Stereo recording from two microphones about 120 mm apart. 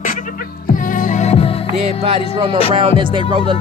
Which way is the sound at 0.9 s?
90° left.